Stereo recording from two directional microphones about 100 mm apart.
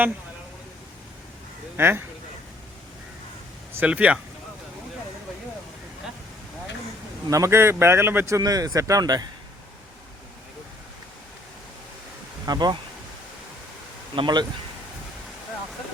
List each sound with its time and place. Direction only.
1.7 s speech: 20° right (ahead or behind)
3.8 s speech: 15° right (ahead or behind)
7.3 s speech: 30° right (ahead or behind)
8.4 s speech: 40° right (ahead or behind)
12.5 s speech: 45° right (ahead or behind)
14.2 s speech: 45° right (ahead or behind)